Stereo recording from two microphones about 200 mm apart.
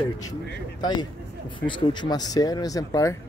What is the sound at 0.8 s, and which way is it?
Speech, 20° left (ahead or behind).